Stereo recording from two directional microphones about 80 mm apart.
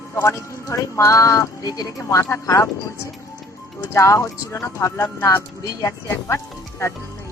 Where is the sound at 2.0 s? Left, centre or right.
Left.